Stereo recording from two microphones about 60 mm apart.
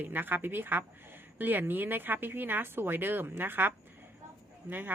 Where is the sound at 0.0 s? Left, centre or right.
Right.